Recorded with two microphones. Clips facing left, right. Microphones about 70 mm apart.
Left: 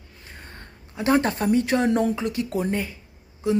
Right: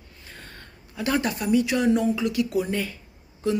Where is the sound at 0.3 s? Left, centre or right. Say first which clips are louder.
Left 1 dB; left.